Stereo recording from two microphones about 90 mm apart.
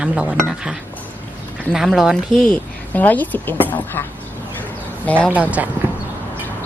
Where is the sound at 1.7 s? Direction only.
5° right (ahead or behind).